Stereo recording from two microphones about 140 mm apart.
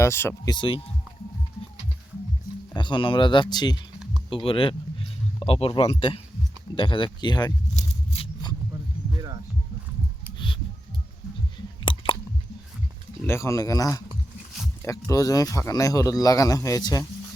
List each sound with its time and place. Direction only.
0.0 s speech: 15° left (ahead or behind)
0.5 s speech: 35° left (ahead or behind)
2.7 s speech: 35° left (ahead or behind)
7.7 s a sound: 55° left (ahead or behind)
8.2 s a sound: 30° left (ahead or behind)
10.3 s music: 35° left (ahead or behind)
11.9 s chewing: 35° left (ahead or behind)
13.2 s speech: 20° left (ahead or behind)